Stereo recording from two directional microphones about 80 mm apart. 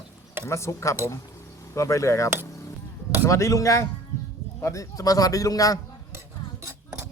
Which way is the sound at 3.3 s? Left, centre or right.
Left.